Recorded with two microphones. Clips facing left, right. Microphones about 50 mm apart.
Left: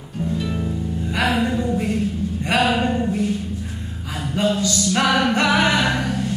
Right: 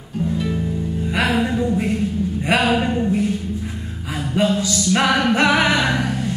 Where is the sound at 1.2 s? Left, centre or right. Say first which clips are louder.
Even; centre.